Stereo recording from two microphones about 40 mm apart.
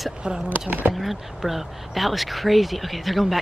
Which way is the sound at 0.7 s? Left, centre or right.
Right.